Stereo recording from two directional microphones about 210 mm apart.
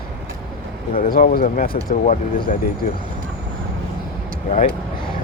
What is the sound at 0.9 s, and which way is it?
Speech, 45° left (ahead or behind).